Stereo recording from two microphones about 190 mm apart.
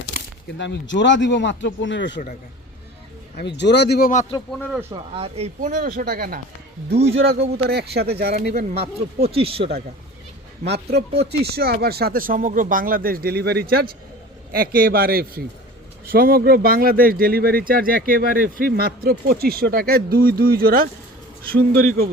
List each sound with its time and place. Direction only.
0.6 s speech: 70° left (ahead or behind)
3.3 s speech: 65° left (ahead or behind); by 4.3 s 45° left (ahead or behind)
4.7 s speech: 10° right (ahead or behind)
5.1 s speech: 30° right (ahead or behind)
5.5 s speech: 45° right (ahead or behind)
7.2 s speech: 60° right (ahead or behind)
8.7 s speech: 30° right (ahead or behind)
10.6 s speech: 60° right (ahead or behind)